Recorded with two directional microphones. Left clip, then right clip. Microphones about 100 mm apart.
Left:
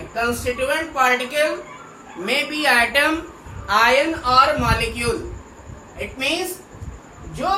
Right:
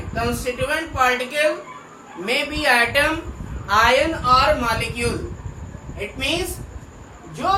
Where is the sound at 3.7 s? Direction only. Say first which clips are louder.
Even; 35° left (ahead or behind).